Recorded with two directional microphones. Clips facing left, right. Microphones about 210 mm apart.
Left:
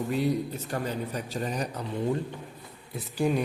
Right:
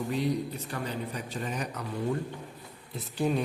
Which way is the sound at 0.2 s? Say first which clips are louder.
Left 2 dB; 45° left (ahead or behind).